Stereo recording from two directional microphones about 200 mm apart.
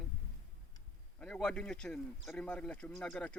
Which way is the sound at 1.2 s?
5° left (ahead or behind).